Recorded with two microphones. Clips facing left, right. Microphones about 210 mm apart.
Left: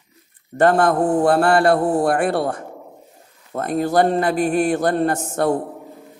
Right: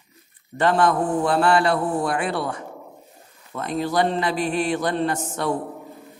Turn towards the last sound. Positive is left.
turn(degrees=45)  # may be behind; listen again after turning